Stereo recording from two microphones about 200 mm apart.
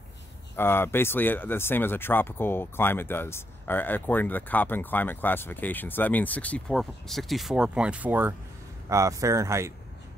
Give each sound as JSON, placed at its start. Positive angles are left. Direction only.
{"t": 0.6, "sound": "speech", "side_deg": 10}